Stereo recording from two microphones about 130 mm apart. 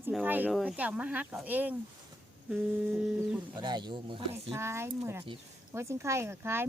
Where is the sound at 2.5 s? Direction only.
5° right (ahead or behind).